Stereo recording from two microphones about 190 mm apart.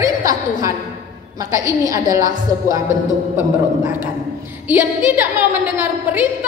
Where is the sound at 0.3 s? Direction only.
15° right (ahead or behind).